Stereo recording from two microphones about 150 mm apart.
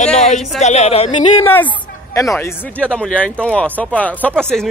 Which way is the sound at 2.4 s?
10° left (ahead or behind).